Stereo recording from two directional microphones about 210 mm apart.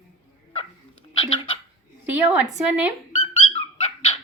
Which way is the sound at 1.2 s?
25° left (ahead or behind).